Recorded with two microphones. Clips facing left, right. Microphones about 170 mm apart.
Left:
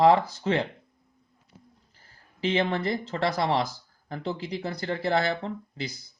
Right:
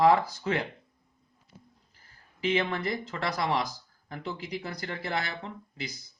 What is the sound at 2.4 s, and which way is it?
Speech, 30° left (ahead or behind).